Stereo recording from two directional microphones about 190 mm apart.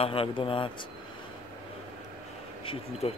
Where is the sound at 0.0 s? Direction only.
30° left (ahead or behind).